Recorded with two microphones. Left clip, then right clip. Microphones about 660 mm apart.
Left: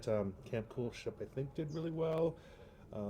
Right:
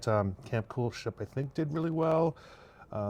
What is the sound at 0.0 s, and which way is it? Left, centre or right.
Speech, right.